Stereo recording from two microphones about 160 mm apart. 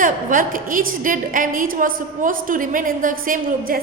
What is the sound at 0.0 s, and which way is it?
A woman's voice, 55° right (ahead or behind).